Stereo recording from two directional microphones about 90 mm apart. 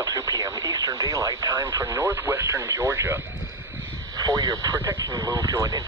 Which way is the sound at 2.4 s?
35° right (ahead or behind).